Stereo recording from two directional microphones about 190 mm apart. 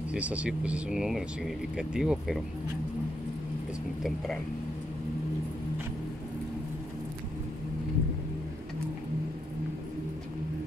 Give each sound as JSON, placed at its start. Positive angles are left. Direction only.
{"t": 0.1, "sound": "speech", "side_deg": -5}